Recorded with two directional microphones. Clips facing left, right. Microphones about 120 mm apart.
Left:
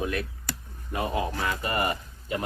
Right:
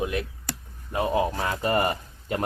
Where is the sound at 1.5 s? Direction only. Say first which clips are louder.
Right 4 dB; 40° right (ahead or behind).